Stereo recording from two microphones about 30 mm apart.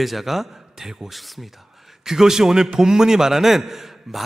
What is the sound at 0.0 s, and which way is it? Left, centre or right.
A man's voice, centre.